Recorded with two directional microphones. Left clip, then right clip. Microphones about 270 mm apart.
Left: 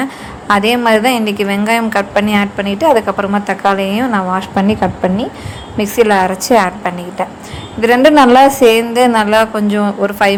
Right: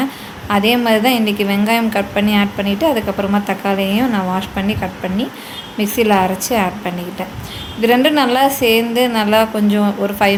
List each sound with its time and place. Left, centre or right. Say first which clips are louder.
0.0 s a woman's voice: left 2 dB; left